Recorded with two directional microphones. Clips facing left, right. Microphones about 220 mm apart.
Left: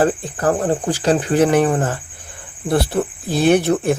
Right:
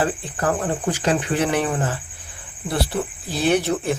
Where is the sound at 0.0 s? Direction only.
40° left (ahead or behind).